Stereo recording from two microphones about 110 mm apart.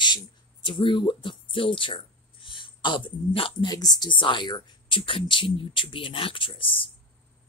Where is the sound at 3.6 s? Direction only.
35° left (ahead or behind).